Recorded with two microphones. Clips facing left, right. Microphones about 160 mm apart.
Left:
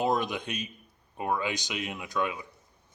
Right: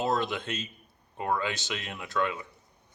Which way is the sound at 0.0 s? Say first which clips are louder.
Left 1 dB; 15° left (ahead or behind).